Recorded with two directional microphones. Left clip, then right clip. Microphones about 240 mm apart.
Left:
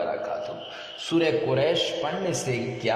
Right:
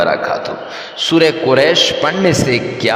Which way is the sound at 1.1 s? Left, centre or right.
Right.